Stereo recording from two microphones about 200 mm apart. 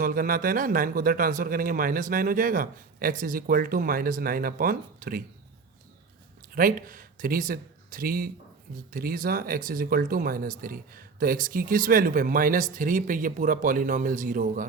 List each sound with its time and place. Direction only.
0.0 s speech: 45° right (ahead or behind)
6.4 s speech: 45° right (ahead or behind)